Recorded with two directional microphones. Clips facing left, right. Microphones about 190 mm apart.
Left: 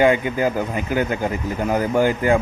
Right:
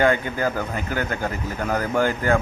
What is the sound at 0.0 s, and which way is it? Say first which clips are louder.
Speech: left 3 dB; 15° left (ahead or behind).